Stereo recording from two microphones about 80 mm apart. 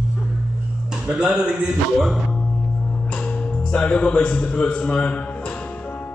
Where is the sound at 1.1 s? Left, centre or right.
Centre.